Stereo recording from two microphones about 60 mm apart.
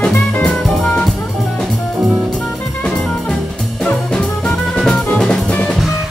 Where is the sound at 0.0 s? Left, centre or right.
Centre.